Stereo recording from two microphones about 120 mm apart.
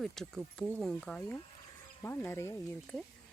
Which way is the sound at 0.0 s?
Centre (ahead or behind).